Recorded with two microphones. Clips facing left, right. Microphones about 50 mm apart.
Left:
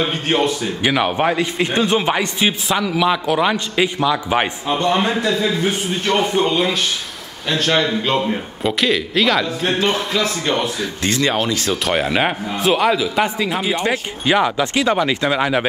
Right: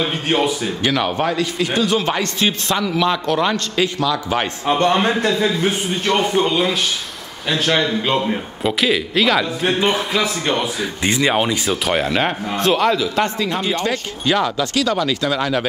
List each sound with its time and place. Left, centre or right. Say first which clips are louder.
0.3 s speech: even; centre
0.8 s speech: left 2 dB; centre
2.0 s a man's voice: left 1 dB; centre
4.7 s a man's voice: right 4 dB; centre
6.0 s speech: even; centre
11.7 s a man's voice: left 2 dB; centre; by 15.6 s left